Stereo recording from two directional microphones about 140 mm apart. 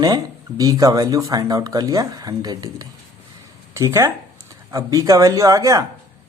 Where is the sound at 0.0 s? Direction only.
25° right (ahead or behind).